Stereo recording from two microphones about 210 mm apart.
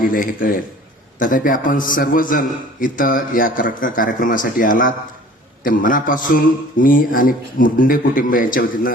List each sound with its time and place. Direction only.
0.0 s a man's voice: 40° left (ahead or behind)